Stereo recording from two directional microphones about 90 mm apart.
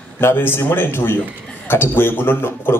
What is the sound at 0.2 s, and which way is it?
A man's voice, 25° left (ahead or behind).